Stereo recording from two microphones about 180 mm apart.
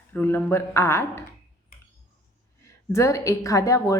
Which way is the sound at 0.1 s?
10° left (ahead or behind).